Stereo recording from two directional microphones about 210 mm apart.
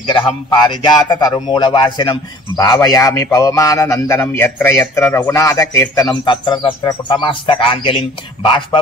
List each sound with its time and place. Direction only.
0.0 s speech: 20° left (ahead or behind)